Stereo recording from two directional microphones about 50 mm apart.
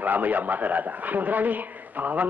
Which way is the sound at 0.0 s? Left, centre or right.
Right.